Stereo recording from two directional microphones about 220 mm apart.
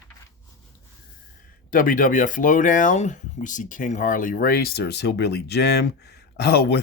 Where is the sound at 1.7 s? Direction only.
40° left (ahead or behind).